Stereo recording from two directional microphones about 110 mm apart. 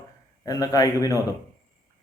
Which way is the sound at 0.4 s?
35° left (ahead or behind).